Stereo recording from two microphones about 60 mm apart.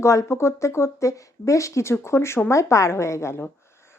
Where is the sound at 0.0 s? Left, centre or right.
Left.